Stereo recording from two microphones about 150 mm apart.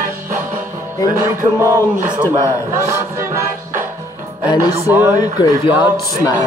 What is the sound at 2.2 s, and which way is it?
Speech, 25° right (ahead or behind).